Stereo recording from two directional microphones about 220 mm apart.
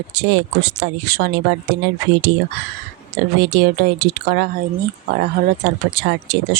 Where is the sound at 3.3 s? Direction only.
50° right (ahead or behind).